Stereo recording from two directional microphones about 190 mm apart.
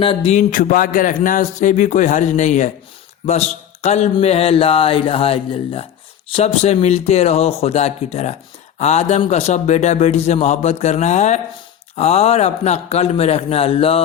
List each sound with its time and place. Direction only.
0.0 s speech: 30° left (ahead or behind)